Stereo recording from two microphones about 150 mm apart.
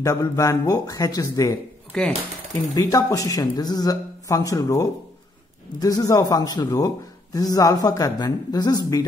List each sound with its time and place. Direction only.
0.0 s speech: 20° left (ahead or behind)
1.9 s speech: 5° left (ahead or behind)
2.7 s speech: 25° left (ahead or behind)